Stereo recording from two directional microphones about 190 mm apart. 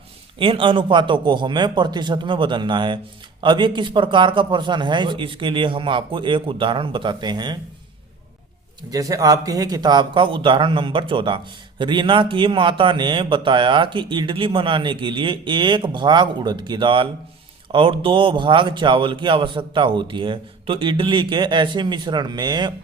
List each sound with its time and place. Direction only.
0.3 s a man's voice: 25° right (ahead or behind)
8.9 s a man's voice: 20° right (ahead or behind)